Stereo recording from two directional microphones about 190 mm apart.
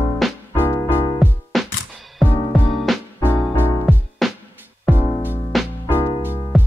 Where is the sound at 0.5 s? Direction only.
15° left (ahead or behind).